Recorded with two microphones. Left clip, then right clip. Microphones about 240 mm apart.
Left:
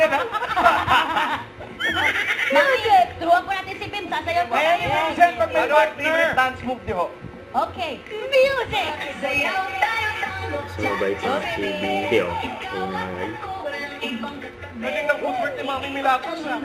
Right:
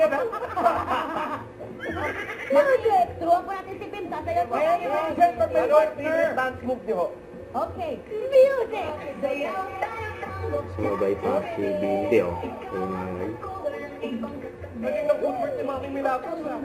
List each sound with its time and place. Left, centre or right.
0.0 s snicker: left
1.8 s neigh: centre
3.9 s a sound: centre
7.5 s a woman's voice: centre
14.8 s a woman's voice: centre